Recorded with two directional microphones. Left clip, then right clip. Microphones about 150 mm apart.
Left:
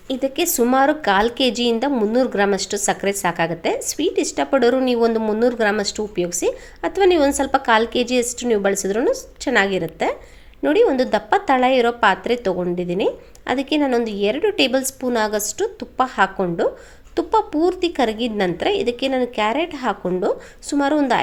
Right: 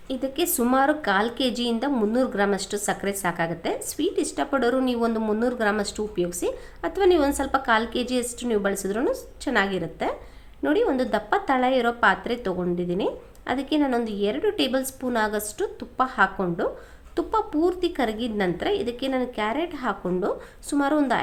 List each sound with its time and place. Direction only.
0.1 s a woman's voice: 20° left (ahead or behind)